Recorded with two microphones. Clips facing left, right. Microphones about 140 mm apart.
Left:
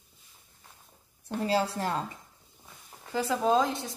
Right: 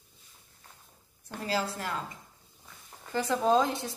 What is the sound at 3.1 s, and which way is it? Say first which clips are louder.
Speech: even; 5° left (ahead or behind).